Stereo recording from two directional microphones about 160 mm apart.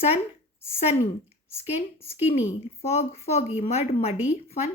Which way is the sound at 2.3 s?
40° left (ahead or behind).